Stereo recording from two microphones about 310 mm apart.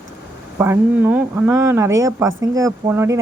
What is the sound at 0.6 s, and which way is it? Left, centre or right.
Speech, centre.